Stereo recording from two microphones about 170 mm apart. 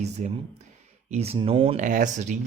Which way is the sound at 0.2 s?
45° right (ahead or behind).